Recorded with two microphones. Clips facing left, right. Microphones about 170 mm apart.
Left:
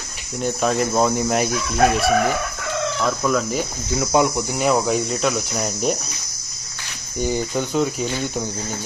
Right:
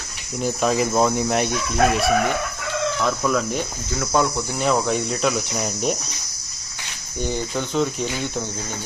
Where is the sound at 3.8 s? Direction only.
20° left (ahead or behind); by 6.0 s centre (ahead or behind).